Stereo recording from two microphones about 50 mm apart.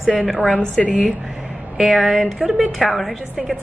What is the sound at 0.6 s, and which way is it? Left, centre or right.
Speech, left.